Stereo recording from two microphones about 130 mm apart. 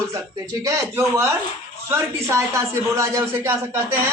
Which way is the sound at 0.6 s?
25° right (ahead or behind).